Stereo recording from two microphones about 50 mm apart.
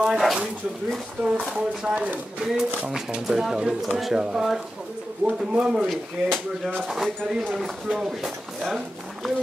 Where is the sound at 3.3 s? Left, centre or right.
Centre.